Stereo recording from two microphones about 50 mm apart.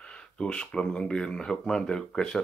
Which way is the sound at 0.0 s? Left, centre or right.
Left.